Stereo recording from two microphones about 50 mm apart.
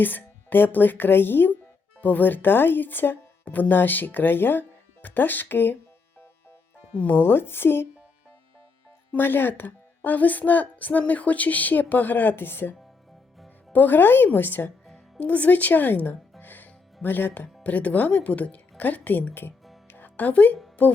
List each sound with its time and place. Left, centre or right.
0.0 s a woman's voice: left
7.2 s speech: left
9.1 s a woman's voice: left
13.7 s a woman's voice: left
15.2 s a woman's voice: left
19.9 s music: left
20.8 s a woman's voice: left